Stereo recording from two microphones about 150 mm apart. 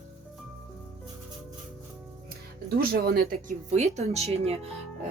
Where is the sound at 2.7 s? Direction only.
90° right.